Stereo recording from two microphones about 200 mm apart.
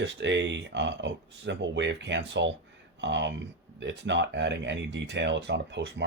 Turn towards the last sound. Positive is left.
turn(degrees=-60)  # may be behind; listen again after turning